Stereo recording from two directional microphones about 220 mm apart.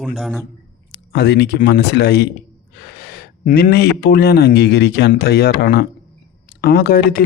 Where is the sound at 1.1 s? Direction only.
50° left (ahead or behind).